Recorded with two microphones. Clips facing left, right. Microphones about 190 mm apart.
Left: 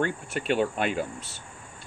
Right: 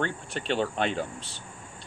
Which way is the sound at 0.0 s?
10° left (ahead or behind).